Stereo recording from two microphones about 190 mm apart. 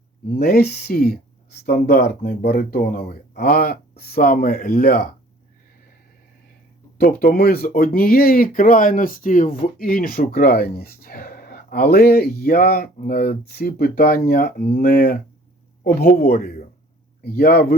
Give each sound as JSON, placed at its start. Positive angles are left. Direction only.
{"t": 0.3, "sound": "speech", "side_deg": 55}
{"t": 7.0, "sound": "speech", "side_deg": 50}